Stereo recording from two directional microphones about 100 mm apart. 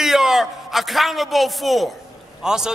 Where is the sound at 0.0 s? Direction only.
5° right (ahead or behind).